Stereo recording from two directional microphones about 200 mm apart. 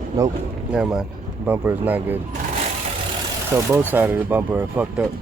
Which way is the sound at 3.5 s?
10° right (ahead or behind).